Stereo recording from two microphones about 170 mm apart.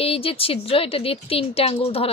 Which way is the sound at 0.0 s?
35° left (ahead or behind).